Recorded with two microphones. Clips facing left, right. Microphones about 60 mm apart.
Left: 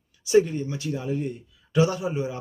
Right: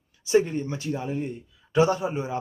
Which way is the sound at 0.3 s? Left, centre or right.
Right.